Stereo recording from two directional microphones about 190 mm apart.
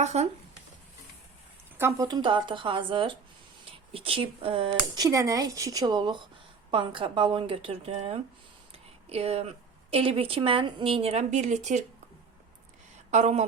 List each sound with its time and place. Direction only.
0.0 s speech: 35° right (ahead or behind)
2.0 s speech: 20° right (ahead or behind)
8.7 s a sound: 30° right (ahead or behind)
9.9 s speech: 30° right (ahead or behind)
13.1 s speech: 35° right (ahead or behind)